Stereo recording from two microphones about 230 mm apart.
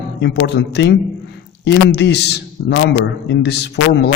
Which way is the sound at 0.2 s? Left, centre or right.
Left.